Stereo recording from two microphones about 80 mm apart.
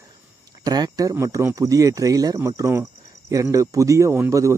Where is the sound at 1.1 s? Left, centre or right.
Right.